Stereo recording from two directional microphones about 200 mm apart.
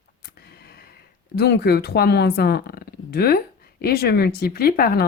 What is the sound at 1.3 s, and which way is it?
Speech, 55° left (ahead or behind).